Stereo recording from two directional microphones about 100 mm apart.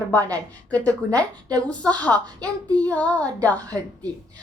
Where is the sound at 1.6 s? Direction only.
15° left (ahead or behind).